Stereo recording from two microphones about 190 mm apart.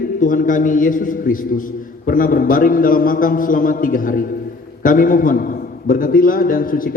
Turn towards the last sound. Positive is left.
turn(degrees=45)  # may be behind; listen again after turning